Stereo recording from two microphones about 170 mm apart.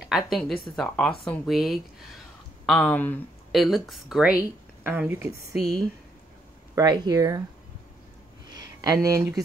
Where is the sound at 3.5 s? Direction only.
Centre (ahead or behind).